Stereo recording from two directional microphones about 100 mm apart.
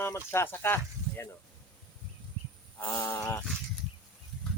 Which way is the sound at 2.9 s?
30° left (ahead or behind).